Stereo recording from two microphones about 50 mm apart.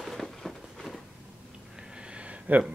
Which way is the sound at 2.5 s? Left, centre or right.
Right.